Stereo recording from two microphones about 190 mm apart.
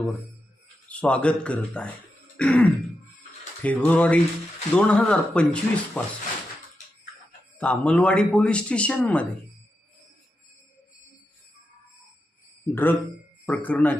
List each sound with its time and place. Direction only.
0.9 s a man's voice: 5° left (ahead or behind)
7.6 s a man's voice: 5° left (ahead or behind)
12.7 s speech: 10° left (ahead or behind)